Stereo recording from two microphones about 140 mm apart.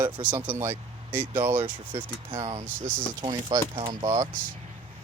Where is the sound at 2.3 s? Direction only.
45° right (ahead or behind).